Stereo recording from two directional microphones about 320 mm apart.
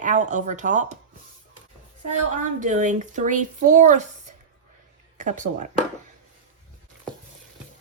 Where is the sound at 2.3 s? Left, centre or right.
Right.